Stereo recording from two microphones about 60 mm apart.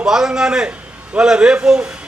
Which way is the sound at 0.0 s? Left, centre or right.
Centre.